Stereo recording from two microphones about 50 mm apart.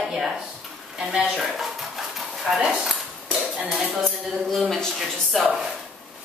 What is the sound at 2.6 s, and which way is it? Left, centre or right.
Speech, centre.